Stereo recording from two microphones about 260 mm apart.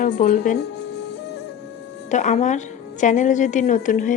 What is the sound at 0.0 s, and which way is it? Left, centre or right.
Speech, left.